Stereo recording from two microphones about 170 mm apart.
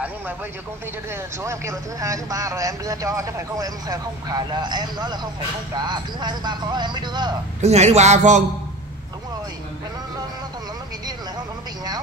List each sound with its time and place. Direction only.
1.1 s speech: 15° right (ahead or behind)
7.6 s speech: 40° right (ahead or behind)
11.1 s a sound: 25° right (ahead or behind)